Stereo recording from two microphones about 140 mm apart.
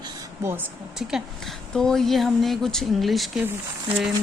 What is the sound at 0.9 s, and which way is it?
A woman's voice, 5° right (ahead or behind).